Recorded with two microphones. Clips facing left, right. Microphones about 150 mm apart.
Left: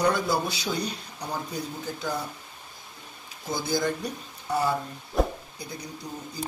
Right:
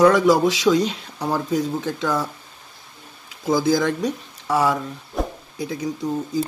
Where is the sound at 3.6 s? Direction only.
90° right.